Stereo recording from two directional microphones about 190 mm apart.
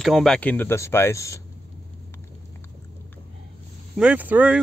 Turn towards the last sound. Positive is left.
turn(degrees=-10)  # may be behind; listen again after turning